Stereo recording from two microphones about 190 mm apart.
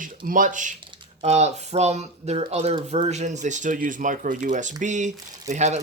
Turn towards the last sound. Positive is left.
turn(degrees=-35)  # may be behind; listen again after turning